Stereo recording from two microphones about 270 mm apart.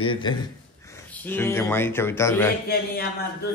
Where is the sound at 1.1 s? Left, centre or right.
Centre.